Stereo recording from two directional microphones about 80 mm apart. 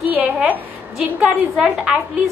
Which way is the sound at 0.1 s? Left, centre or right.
Centre.